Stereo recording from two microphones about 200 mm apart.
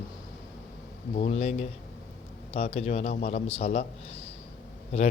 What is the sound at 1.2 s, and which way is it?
Speech, 30° left (ahead or behind).